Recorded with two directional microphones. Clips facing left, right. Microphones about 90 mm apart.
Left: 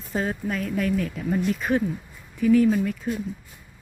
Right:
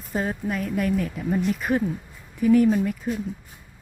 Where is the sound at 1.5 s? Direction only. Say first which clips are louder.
Even; 10° right (ahead or behind).